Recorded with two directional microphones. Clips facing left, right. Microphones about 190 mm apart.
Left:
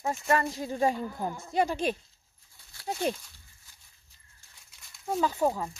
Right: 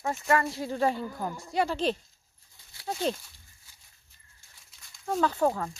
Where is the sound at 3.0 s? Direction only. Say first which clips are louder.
Right 1 dB; 15° left (ahead or behind).